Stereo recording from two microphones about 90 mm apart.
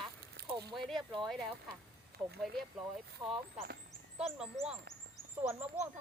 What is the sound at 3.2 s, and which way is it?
Speech, 80° right.